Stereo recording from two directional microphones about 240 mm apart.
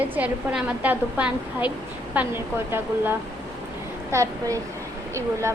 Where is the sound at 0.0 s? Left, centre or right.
Centre.